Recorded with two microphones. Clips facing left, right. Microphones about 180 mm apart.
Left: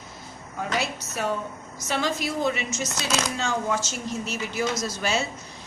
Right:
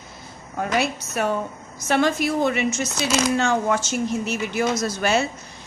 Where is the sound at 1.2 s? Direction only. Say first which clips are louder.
Right 4 dB; 60° right (ahead or behind).